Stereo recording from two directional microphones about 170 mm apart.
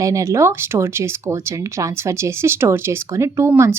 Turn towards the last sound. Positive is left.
turn(degrees=-15)  # may be behind; listen again after turning